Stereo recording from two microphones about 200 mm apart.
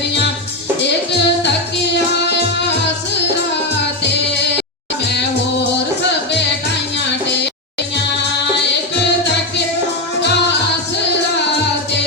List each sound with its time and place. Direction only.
0.8 s music: 60° left (ahead or behind)